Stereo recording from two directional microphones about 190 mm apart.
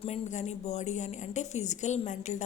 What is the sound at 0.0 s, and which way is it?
A woman's voice, 35° left (ahead or behind).